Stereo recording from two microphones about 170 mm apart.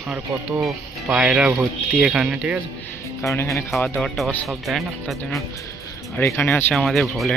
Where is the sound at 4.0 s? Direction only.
5° left (ahead or behind).